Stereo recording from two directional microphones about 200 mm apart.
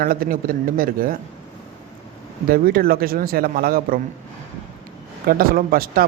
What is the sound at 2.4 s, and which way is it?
Speech, 45° right (ahead or behind).